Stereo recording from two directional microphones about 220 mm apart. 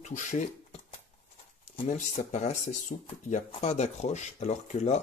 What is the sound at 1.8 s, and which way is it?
Speech, 35° left (ahead or behind).